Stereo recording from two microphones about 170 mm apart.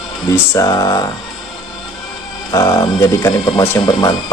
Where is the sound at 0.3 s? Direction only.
20° left (ahead or behind).